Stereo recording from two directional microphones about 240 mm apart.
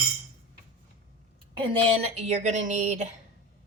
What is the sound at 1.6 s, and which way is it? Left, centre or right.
Speech, right.